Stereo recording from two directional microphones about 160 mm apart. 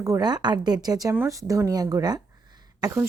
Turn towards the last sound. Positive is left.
turn(degrees=-20)  # may be behind; listen again after turning